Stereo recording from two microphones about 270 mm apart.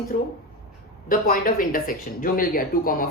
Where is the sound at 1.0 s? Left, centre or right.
Left.